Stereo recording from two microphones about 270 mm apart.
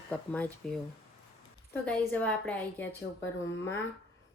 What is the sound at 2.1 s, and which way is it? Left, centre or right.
Speech, centre.